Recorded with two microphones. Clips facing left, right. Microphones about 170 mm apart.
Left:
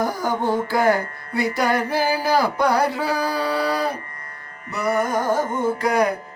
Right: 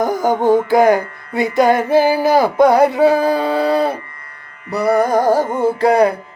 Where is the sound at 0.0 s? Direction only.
20° right (ahead or behind).